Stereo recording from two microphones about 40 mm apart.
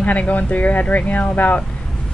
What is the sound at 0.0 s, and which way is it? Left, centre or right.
Speech, left.